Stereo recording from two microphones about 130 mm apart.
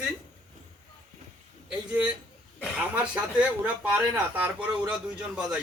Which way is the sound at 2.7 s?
10° right (ahead or behind).